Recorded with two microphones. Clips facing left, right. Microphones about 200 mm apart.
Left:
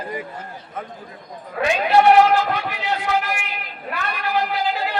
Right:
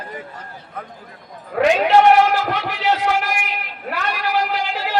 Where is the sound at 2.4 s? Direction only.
90° right.